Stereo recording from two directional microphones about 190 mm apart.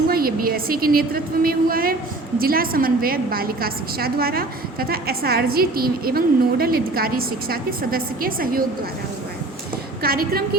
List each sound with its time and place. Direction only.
0.1 s a woman's voice: 50° right (ahead or behind)
10.0 s a woman's voice: 50° right (ahead or behind)